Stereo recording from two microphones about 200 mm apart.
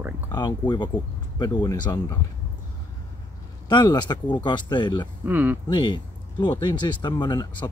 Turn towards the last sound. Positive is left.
turn(degrees=20)  # may be behind; listen again after turning